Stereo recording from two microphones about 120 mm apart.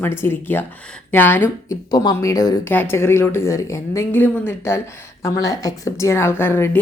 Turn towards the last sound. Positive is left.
turn(degrees=20)  # may be behind; listen again after turning